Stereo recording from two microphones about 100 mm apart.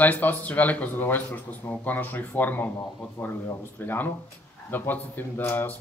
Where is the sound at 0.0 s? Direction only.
15° left (ahead or behind).